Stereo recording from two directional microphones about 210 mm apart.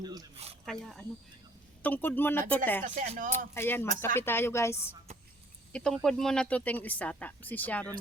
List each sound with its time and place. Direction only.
0.0 s speech: 20° right (ahead or behind)
0.6 s speech: centre (ahead or behind)
2.8 s speech: 35° right (ahead or behind)
3.2 s speech: 10° left (ahead or behind)
5.7 s speech: centre (ahead or behind)